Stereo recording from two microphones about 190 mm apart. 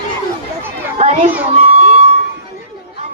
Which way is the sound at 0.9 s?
35° right (ahead or behind).